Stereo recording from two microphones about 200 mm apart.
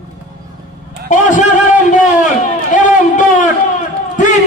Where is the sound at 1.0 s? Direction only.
40° left (ahead or behind).